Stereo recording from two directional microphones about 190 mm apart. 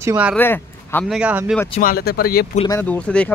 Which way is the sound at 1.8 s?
50° left (ahead or behind).